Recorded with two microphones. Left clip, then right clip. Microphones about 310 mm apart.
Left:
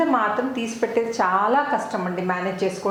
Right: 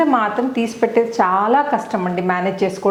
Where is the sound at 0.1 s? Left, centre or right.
Right.